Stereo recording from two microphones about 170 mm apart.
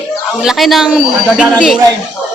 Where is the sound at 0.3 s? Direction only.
Centre (ahead or behind).